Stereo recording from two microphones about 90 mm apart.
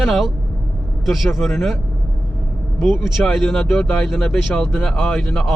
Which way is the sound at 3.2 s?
5° left (ahead or behind).